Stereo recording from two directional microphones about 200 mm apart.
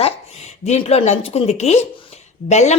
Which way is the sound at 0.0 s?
35° left (ahead or behind).